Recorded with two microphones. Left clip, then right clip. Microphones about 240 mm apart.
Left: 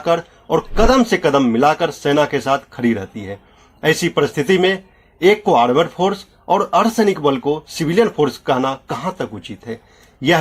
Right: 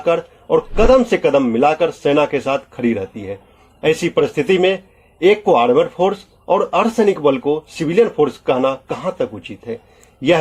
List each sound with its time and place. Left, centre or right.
0.0 s a man's voice: left